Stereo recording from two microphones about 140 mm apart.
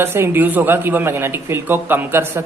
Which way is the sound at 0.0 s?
15° right (ahead or behind).